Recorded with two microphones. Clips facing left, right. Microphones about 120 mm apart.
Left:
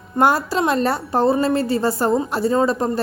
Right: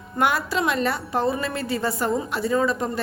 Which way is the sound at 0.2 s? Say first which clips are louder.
Left 5 dB; 35° left (ahead or behind).